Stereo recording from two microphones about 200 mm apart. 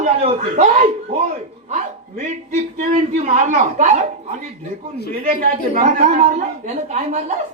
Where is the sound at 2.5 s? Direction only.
35° right (ahead or behind).